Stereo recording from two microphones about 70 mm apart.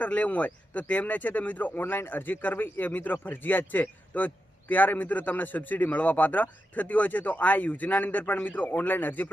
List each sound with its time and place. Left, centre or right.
0.0 s speech: left